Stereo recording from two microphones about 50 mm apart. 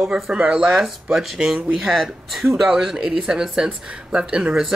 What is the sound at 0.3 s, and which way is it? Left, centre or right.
Speech, centre.